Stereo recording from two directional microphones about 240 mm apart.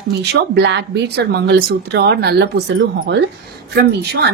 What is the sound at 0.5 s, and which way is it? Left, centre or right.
A woman's voice, right.